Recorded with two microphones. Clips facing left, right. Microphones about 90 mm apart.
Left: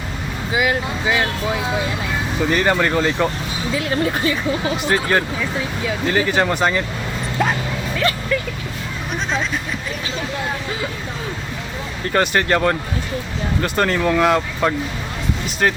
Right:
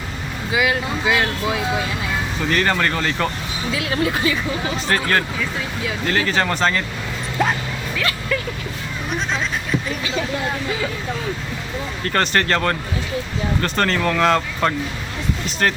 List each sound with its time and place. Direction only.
2.5 s speech: 15° left (ahead or behind)
3.8 s a woman's voice: 40° left (ahead or behind)
4.9 s speech: 15° left (ahead or behind)
12.0 s speech: 10° left (ahead or behind)